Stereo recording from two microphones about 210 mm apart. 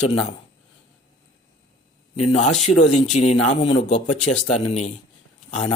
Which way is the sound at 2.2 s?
35° left (ahead or behind).